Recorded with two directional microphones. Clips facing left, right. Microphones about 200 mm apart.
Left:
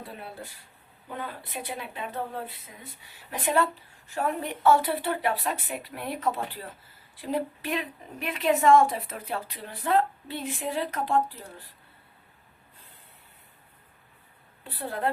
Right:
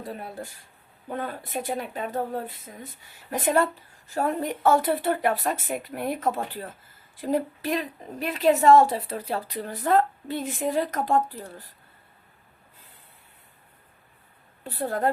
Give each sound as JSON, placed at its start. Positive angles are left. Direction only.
{"t": 1.0, "sound": "a woman's voice", "side_deg": -45}
{"t": 14.6, "sound": "a woman's voice", "side_deg": -45}